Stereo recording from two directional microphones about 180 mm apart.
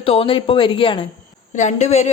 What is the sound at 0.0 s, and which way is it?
Speech, 30° left (ahead or behind).